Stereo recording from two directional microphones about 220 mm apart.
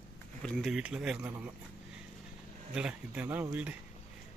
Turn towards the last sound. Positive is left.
turn(degrees=-5)  # may be behind; listen again after turning